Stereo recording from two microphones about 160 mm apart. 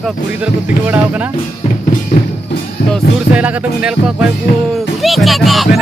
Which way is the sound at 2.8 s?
80° left.